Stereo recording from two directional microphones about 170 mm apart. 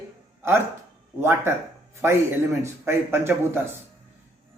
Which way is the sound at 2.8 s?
15° right (ahead or behind).